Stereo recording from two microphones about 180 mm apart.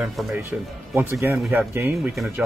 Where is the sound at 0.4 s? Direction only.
10° right (ahead or behind).